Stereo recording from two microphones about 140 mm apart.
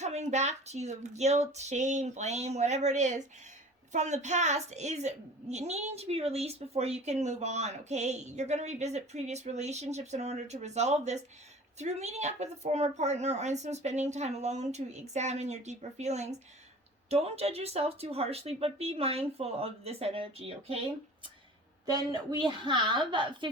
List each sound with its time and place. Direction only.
0.0 s a woman's voice: 55° right (ahead or behind)
21.8 s a woman's voice: 25° right (ahead or behind)